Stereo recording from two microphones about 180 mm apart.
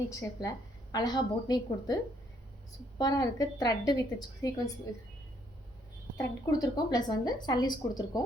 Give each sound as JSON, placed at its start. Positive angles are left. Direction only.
{"t": 0.1, "sound": "a woman's voice", "side_deg": 20}
{"t": 3.0, "sound": "a woman's voice", "side_deg": 20}
{"t": 6.1, "sound": "a woman's voice", "side_deg": 20}